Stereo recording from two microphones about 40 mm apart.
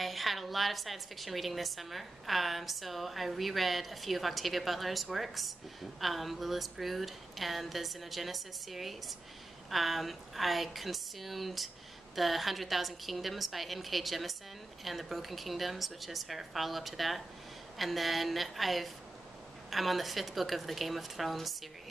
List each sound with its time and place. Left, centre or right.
0.0 s a woman's voice: centre